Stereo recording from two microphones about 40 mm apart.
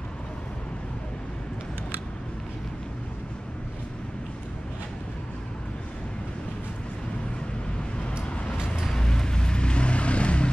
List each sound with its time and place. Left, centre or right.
8.9 s vehicle: centre